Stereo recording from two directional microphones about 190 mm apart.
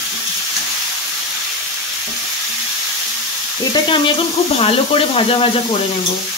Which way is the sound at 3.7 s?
25° left (ahead or behind).